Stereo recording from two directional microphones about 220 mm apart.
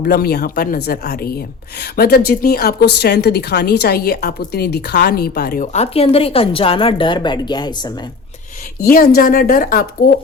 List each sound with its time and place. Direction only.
0.0 s a woman's voice: 45° left (ahead or behind)
5.7 s a woman's voice: 30° left (ahead or behind)
8.8 s a woman's voice: 40° left (ahead or behind)